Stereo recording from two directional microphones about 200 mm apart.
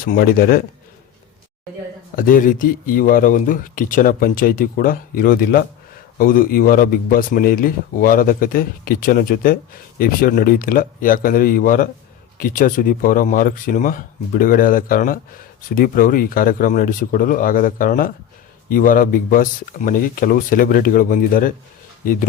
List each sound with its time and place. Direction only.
0.0 s speech: 50° left (ahead or behind)
2.1 s speech: 45° left (ahead or behind)